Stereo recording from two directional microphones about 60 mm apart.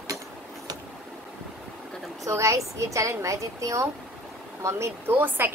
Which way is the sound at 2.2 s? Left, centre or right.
Right.